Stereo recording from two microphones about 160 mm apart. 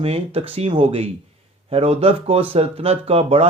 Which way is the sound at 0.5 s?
35° right (ahead or behind).